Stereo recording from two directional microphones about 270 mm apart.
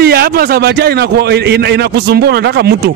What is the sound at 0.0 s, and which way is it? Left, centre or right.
A man's voice, right.